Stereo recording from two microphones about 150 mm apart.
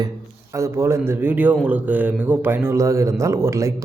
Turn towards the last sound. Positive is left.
turn(degrees=-20)  # may be behind; listen again after turning